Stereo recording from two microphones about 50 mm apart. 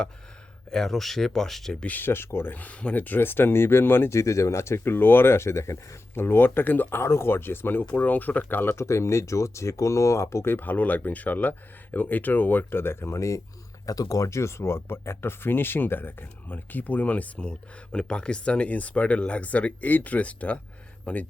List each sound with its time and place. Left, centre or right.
0.7 s speech: centre
1.9 s speech: left
2.6 s speech: left
4.1 s speech: left
6.1 s speech: left
7.0 s speech: left
7.9 s speech: left
8.7 s speech: left
10.4 s speech: left
13.1 s speech: left